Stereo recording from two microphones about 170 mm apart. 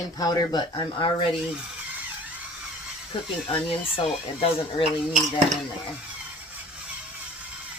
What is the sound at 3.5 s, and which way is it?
Speech, 35° left (ahead or behind).